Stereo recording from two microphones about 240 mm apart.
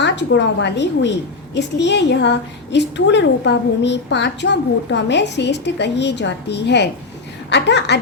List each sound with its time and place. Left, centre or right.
0.0 s a woman's voice: left